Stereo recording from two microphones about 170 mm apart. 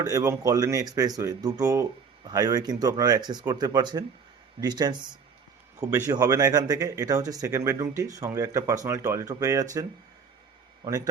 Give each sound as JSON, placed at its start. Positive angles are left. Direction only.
{"t": 0.0, "sound": "speech", "side_deg": -20}
{"t": 10.8, "sound": "speech", "side_deg": -20}